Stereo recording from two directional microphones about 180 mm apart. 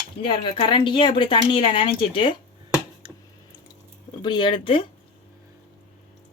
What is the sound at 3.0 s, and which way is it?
Squish, 30° right (ahead or behind).